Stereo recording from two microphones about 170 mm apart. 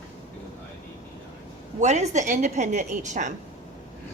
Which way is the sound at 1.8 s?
45° right (ahead or behind).